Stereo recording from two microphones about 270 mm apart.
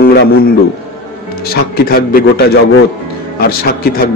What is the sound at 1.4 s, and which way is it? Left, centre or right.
A man's voice, left.